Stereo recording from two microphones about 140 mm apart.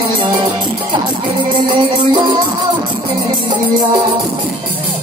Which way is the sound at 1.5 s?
35° right (ahead or behind).